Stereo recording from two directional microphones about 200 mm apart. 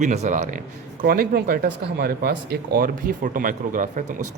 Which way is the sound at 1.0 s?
50° right (ahead or behind).